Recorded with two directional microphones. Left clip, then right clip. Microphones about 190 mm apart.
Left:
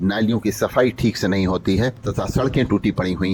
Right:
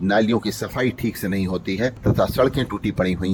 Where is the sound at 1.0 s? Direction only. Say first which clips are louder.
Left 5 dB; 5° right (ahead or behind).